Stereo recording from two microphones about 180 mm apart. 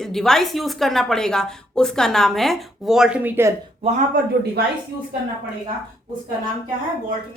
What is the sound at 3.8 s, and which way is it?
Speech, 35° right (ahead or behind).